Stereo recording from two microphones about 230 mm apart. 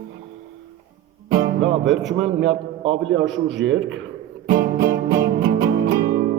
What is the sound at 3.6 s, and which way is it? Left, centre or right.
Speech, right.